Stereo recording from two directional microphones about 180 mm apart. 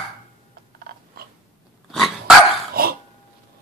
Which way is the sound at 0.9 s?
55° right (ahead or behind).